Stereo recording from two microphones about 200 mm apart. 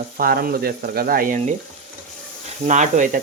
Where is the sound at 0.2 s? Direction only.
50° right (ahead or behind).